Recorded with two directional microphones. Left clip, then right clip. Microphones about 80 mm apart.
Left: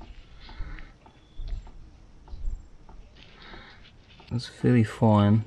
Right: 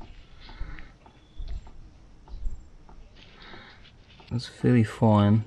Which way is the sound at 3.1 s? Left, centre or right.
Centre.